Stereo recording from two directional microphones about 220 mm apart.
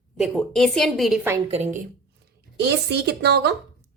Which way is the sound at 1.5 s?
30° right (ahead or behind).